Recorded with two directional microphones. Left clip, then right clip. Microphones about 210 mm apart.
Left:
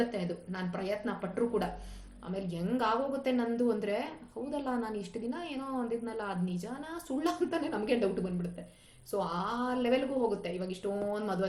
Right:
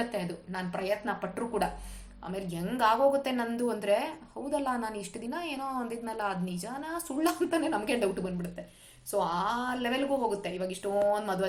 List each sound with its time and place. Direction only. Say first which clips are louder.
0.1 s a woman's voice: right 2 dB; 20° right (ahead or behind)